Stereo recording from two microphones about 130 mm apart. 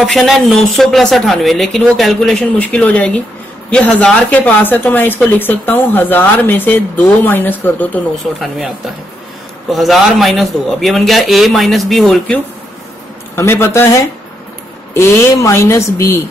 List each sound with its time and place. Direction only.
0.0 s speech: centre (ahead or behind)
8.2 s speech: centre (ahead or behind)
13.4 s speech: 20° left (ahead or behind)
15.0 s speech: 20° left (ahead or behind)